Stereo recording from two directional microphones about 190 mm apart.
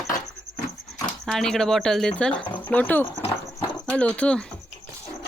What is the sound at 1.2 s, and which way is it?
Speech, centre (ahead or behind).